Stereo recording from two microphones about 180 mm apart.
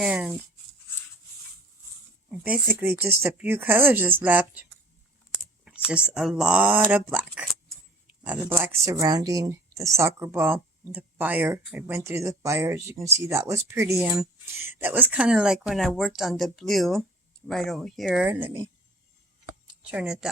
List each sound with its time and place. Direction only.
0.0 s speech: 5° right (ahead or behind)
2.4 s speech: 10° right (ahead or behind)
5.9 s speech: 5° right (ahead or behind)
8.2 s speech: 10° right (ahead or behind)
19.8 s speech: 5° right (ahead or behind)